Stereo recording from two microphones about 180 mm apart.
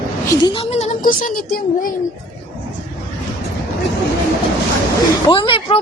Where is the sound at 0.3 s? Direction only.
25° left (ahead or behind); by 1.9 s 50° left (ahead or behind).